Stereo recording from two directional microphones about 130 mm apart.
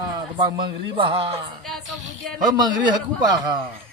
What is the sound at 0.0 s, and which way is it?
A man's voice, 30° right (ahead or behind).